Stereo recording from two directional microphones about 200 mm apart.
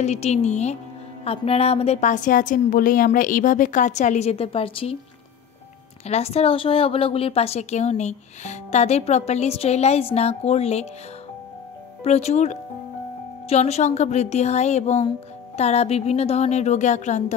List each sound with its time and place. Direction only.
0.0 s a woman's voice: 35° left (ahead or behind)
6.0 s a woman's voice: 30° left (ahead or behind)
12.0 s a woman's voice: 30° left (ahead or behind)